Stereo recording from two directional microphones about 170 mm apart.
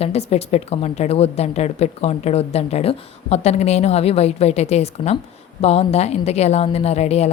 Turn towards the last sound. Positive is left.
turn(degrees=40)  # may be behind; listen again after turning